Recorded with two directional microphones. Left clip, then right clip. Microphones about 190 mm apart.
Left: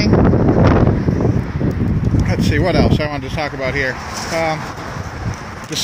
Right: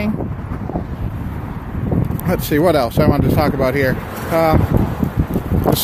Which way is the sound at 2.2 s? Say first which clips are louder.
Right 4 dB; 30° right (ahead or behind).